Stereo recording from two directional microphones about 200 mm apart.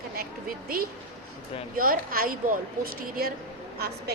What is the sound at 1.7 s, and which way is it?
A woman's voice, 45° right (ahead or behind).